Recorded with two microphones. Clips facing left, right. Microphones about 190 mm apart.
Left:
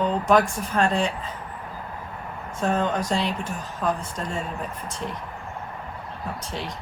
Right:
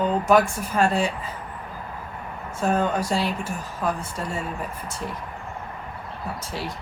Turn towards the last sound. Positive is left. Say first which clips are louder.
# even
turn(degrees=-5)  # may be behind; listen again after turning